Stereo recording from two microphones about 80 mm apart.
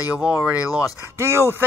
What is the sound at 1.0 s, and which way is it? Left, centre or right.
Speech, right.